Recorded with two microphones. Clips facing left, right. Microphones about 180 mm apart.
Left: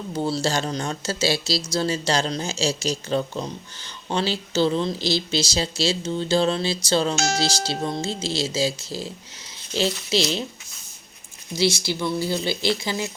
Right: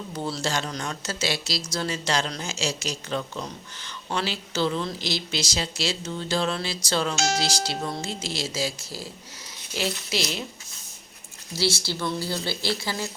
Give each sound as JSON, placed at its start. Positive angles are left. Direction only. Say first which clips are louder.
{"t": 0.2, "sound": "speech", "louder": "left 5 dB", "side_deg": 30}
{"t": 11.5, "sound": "speech", "louder": "left 4 dB", "side_deg": 15}